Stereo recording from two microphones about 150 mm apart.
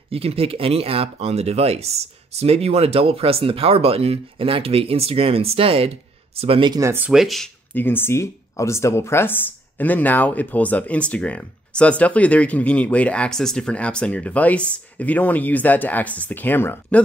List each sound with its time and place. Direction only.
0.1 s speech: 40° right (ahead or behind)
6.8 s speech: 15° right (ahead or behind)
7.1 s speech: centre (ahead or behind)
7.7 s speech: 15° left (ahead or behind)